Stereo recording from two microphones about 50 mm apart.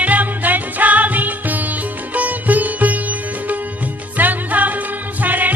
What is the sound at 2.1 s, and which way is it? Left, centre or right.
Sitar, right.